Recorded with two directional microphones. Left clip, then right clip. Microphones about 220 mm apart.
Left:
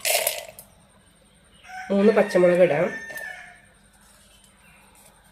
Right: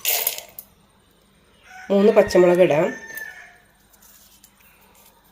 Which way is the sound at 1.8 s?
25° right (ahead or behind).